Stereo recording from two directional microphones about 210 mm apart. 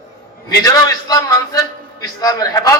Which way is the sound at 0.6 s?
20° left (ahead or behind).